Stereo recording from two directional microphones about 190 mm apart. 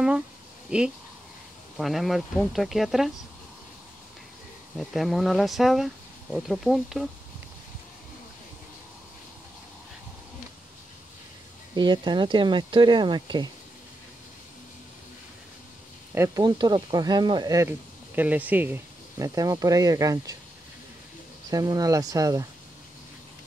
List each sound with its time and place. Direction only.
0.7 s speech: 5° right (ahead or behind)
4.7 s speech: centre (ahead or behind)
11.7 s speech: 25° right (ahead or behind)
16.2 s speech: 20° right (ahead or behind)
21.5 s speech: 20° right (ahead or behind)